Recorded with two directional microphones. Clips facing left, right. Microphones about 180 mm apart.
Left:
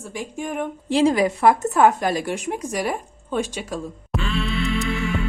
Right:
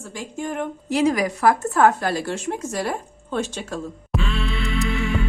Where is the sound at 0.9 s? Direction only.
25° left (ahead or behind).